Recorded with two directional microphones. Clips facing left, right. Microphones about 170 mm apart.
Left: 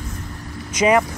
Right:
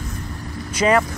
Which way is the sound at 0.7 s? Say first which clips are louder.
Left 1 dB; 15° left (ahead or behind).